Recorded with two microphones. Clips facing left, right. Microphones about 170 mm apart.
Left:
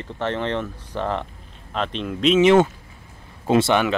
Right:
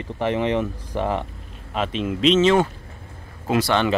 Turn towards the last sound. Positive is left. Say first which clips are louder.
# left 3 dB
turn(degrees=25)  # may be behind; listen again after turning